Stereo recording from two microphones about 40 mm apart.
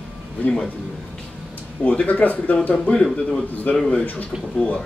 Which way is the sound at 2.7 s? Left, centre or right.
Left.